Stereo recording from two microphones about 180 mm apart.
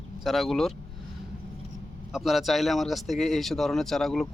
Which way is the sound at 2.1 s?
Centre (ahead or behind).